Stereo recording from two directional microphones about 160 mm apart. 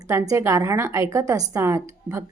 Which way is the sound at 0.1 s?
20° right (ahead or behind).